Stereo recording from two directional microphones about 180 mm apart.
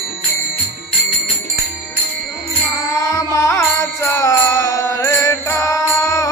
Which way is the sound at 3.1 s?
15° left (ahead or behind).